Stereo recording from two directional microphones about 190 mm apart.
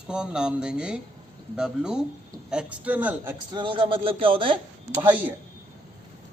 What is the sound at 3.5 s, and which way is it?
A man's voice, 25° right (ahead or behind).